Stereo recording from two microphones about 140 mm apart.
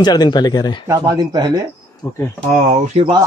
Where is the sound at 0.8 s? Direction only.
30° right (ahead or behind).